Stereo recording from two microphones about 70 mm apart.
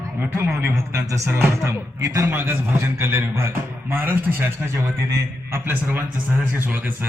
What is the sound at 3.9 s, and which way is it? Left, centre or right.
Speech, right.